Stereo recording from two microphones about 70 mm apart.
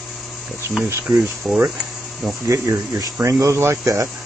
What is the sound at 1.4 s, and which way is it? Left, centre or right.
Speech, centre.